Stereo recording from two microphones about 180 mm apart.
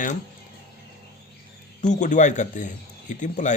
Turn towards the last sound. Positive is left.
turn(degrees=45)  # may be behind; listen again after turning